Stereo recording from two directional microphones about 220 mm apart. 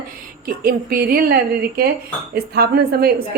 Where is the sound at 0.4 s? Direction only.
40° right (ahead or behind).